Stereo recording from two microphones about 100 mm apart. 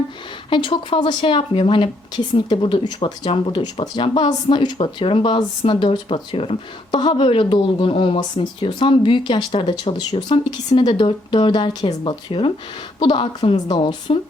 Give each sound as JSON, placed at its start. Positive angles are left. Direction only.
{"t": 0.5, "sound": "speech", "side_deg": 55}
{"t": 6.9, "sound": "speech", "side_deg": 50}
{"t": 11.7, "sound": "speech", "side_deg": 40}
{"t": 13.0, "sound": "speech", "side_deg": 55}